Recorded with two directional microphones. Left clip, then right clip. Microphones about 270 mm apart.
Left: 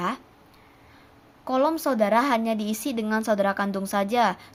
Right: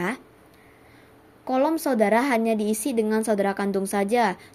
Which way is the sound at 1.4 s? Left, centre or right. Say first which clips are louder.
Even; centre.